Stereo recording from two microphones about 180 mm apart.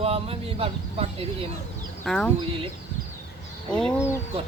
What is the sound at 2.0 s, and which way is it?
Speech, centre (ahead or behind).